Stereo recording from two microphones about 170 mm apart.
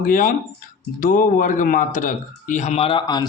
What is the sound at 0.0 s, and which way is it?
Speech, 55° left (ahead or behind).